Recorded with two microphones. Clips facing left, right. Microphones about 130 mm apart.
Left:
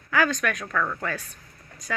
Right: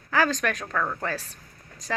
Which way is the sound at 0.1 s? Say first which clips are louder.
Even; 35° right (ahead or behind).